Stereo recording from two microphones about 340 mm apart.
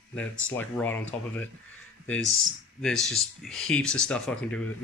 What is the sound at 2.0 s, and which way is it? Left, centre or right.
Speech, centre.